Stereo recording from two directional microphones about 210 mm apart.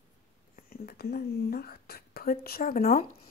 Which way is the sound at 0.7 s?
45° left (ahead or behind).